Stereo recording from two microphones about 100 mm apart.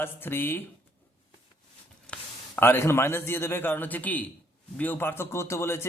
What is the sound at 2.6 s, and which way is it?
Speech, 25° left (ahead or behind).